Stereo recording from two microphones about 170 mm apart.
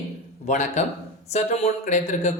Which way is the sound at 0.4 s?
45° left (ahead or behind).